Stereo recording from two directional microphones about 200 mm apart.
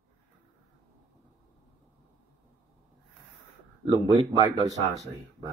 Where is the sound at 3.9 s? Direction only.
25° right (ahead or behind).